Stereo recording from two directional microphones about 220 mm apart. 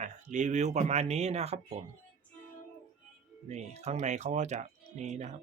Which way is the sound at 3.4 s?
30° right (ahead or behind).